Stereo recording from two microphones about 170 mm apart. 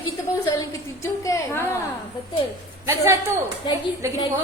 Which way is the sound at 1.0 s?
15° left (ahead or behind).